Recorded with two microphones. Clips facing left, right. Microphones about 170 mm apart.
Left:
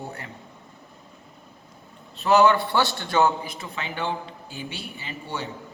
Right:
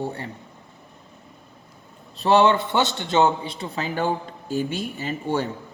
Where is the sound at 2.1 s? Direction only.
30° right (ahead or behind).